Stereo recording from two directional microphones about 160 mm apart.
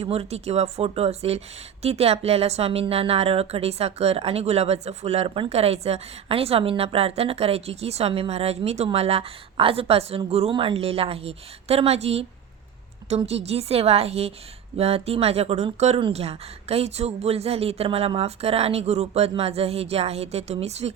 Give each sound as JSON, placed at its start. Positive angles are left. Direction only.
{"t": 0.0, "sound": "a woman's voice", "side_deg": -40}